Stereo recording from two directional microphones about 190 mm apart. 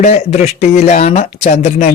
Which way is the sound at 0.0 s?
35° left (ahead or behind).